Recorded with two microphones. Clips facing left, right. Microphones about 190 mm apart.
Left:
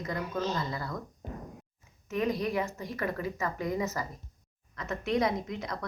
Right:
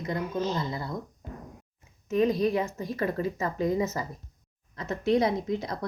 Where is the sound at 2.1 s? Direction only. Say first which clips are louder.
Right 6 dB; 25° right (ahead or behind).